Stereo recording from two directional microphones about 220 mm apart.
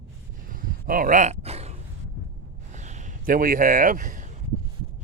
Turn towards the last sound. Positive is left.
turn(degrees=-35)  # may be behind; listen again after turning